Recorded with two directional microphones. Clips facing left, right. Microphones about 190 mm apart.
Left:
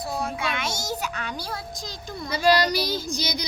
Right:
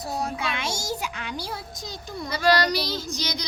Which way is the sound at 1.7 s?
90° left.